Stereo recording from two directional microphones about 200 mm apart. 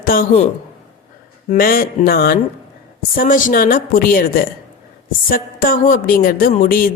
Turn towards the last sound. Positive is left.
turn(degrees=45)  # may be behind; listen again after turning